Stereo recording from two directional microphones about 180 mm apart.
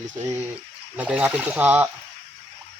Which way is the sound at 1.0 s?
5° right (ahead or behind).